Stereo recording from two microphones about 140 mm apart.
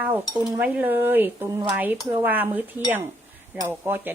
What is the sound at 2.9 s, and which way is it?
Chink, 15° right (ahead or behind).